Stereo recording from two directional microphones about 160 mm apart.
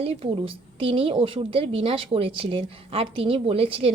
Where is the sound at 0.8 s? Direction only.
35° right (ahead or behind).